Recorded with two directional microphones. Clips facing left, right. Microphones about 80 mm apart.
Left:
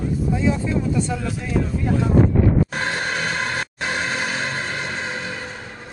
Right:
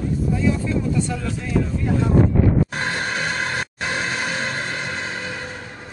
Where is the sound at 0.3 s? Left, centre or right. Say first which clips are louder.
Even; left.